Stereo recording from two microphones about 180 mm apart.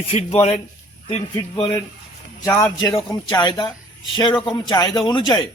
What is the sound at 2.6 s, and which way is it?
Speech, 20° left (ahead or behind).